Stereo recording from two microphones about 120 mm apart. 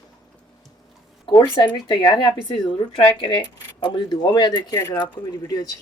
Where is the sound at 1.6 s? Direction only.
40° left (ahead or behind).